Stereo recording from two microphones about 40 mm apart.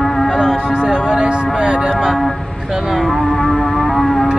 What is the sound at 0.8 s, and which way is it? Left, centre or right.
Music, left.